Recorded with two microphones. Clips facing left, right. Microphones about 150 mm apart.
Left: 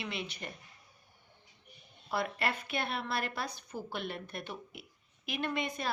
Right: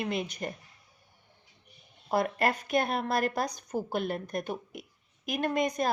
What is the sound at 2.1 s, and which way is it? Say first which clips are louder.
Speech: right 7 dB; 45° right (ahead or behind).